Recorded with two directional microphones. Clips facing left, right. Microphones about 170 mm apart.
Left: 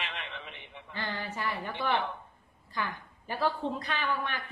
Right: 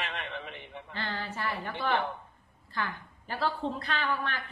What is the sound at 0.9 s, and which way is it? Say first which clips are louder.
Speech: even; 15° left (ahead or behind).